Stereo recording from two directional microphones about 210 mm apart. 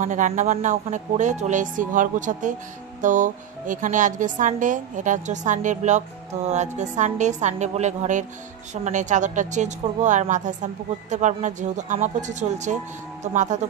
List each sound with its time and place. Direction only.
0.0 s a woman's voice: 35° right (ahead or behind)